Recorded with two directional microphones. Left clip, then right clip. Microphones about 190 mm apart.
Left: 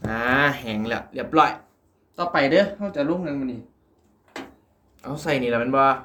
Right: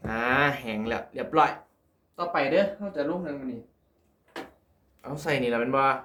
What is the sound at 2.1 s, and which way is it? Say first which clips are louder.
Speech: left 5 dB; 15° left (ahead or behind).